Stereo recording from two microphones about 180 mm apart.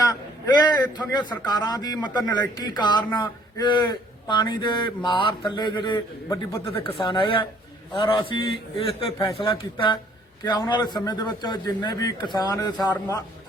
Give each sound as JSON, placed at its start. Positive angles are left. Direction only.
{"t": 0.9, "sound": "a man's voice", "side_deg": 25}
{"t": 6.8, "sound": "a man's voice", "side_deg": 30}